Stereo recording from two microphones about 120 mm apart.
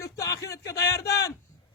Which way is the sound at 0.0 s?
30° left (ahead or behind).